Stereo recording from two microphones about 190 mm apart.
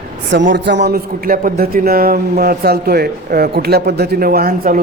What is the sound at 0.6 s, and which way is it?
A man's voice, 65° right (ahead or behind).